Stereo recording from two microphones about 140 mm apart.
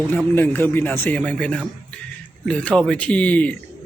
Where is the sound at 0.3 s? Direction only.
15° left (ahead or behind).